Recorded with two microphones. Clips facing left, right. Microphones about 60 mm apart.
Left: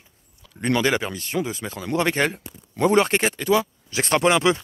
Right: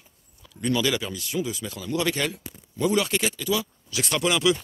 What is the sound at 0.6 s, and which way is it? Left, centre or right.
Speech, left.